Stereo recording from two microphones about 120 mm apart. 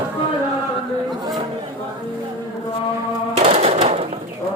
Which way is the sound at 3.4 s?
60° right (ahead or behind).